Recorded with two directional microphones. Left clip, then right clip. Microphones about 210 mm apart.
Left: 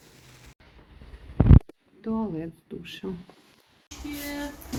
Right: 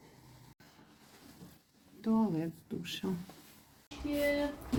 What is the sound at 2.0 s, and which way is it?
Speech, 10° right (ahead or behind).